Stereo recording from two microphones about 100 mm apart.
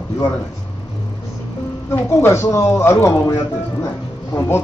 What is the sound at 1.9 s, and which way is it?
A man's voice, 25° left (ahead or behind).